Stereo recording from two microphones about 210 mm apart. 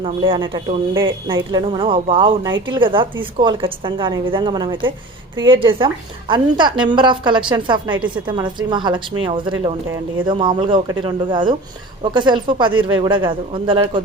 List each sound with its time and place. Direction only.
0.0 s speech: 25° right (ahead or behind)